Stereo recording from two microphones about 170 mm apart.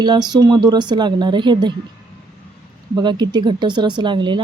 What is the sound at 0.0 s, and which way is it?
A woman's voice, 25° right (ahead or behind).